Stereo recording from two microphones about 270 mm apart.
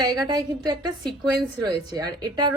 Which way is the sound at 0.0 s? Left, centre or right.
Centre.